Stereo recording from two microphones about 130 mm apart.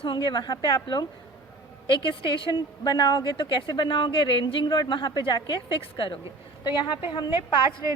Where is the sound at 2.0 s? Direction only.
40° left (ahead or behind).